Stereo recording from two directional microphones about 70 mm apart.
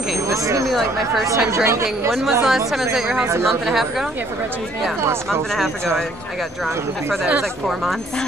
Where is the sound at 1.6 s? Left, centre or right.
Right.